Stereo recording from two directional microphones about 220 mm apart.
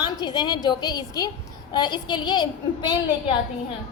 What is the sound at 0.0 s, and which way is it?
A woman's voice, 20° left (ahead or behind).